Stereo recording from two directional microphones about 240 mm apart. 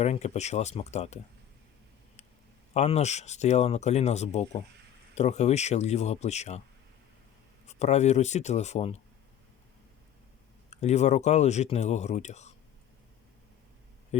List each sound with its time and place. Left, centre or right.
0.0 s speech: left
2.7 s speech: left
7.7 s speech: left
10.7 s speech: left
14.1 s a sound: left